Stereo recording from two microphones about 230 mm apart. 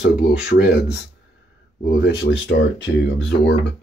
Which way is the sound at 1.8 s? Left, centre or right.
Left.